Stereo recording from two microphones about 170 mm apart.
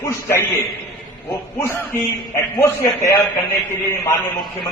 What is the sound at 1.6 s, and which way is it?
Speech, 15° left (ahead or behind).